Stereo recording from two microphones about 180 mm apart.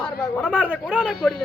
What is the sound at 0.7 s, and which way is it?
Speech, 5° right (ahead or behind).